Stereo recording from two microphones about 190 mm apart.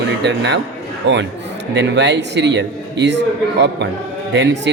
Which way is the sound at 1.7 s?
70° right (ahead or behind).